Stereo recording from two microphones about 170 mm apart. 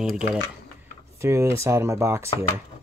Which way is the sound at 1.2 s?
15° right (ahead or behind).